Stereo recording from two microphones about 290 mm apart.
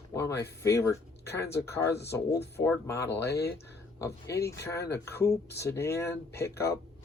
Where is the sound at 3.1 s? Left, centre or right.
Left.